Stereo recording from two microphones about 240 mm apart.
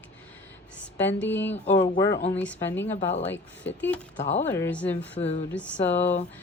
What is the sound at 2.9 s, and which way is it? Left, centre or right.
Speech, left.